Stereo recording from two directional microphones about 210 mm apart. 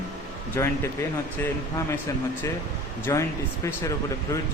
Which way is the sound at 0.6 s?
10° left (ahead or behind).